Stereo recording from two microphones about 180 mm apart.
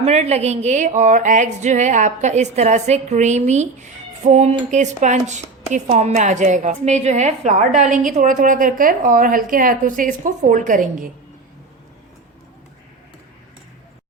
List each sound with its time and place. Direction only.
0.0 s a woman's voice: 35° right (ahead or behind)